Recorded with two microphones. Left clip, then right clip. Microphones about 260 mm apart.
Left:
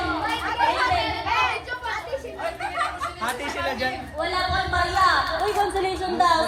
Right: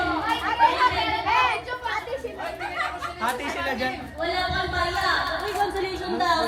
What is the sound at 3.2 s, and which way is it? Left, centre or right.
Chatter, right.